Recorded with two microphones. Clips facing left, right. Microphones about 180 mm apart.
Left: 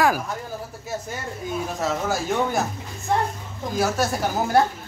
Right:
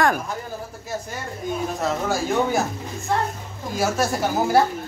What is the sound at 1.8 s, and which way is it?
Speech, centre (ahead or behind).